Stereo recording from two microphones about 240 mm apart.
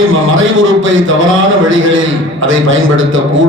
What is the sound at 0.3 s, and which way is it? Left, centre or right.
A man's voice, right.